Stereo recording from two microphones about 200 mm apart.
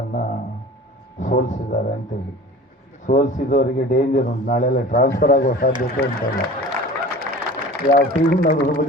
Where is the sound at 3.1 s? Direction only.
40° left (ahead or behind).